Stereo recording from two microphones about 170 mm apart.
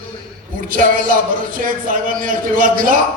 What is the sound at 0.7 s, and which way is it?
A man's voice, 55° right (ahead or behind).